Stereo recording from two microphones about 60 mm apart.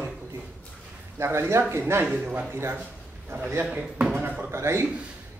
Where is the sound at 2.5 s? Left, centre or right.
Right.